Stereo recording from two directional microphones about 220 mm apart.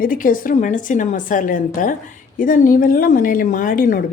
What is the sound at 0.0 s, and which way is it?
A woman's voice, 40° left (ahead or behind).